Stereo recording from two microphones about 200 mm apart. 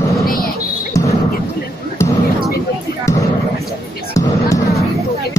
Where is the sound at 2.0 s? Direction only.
15° left (ahead or behind).